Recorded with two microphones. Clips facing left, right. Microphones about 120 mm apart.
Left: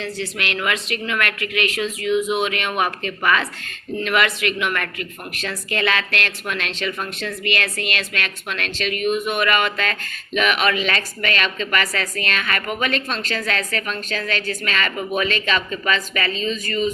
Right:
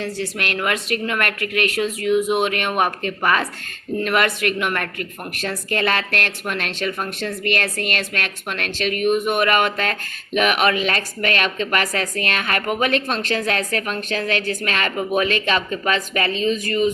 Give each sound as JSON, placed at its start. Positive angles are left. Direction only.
{"t": 0.3, "sound": "a woman's voice", "side_deg": -45}
{"t": 16.1, "sound": "speech", "side_deg": -55}